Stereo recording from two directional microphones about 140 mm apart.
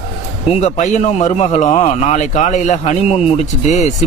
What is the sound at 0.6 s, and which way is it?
A man's voice, 55° left (ahead or behind).